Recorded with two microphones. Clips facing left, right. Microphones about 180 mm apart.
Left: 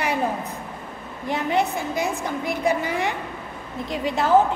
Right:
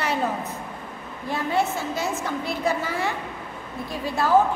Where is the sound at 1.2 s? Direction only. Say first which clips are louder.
Left 2 dB; 20° left (ahead or behind).